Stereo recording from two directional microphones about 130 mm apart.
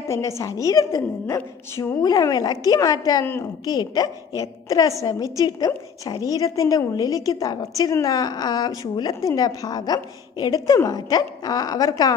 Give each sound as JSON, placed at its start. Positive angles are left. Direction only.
{"t": 0.1, "sound": "a woman's voice", "side_deg": 25}